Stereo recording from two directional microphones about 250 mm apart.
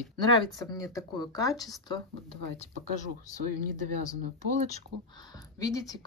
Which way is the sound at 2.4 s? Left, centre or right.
Right.